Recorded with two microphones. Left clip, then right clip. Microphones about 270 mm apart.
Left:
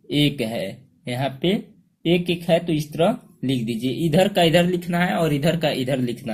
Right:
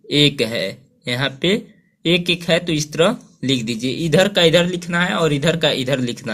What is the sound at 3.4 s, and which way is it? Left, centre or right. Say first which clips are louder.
Speech: right 5 dB; right.